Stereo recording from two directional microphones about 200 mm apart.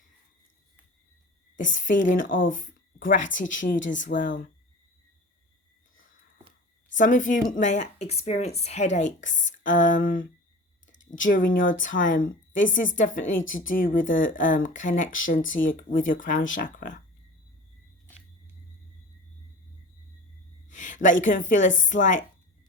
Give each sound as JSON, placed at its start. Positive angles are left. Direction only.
{"t": 1.5, "sound": "speech", "side_deg": 40}
{"t": 7.0, "sound": "speech", "side_deg": 40}
{"t": 20.7, "sound": "a woman's voice", "side_deg": 40}